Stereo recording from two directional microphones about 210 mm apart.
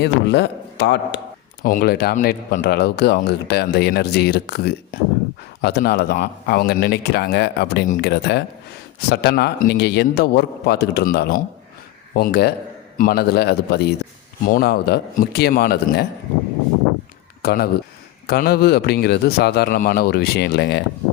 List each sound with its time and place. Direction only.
0.0 s a man's voice: 55° left (ahead or behind)
1.6 s speech: 45° left (ahead or behind)
17.4 s speech: 45° left (ahead or behind)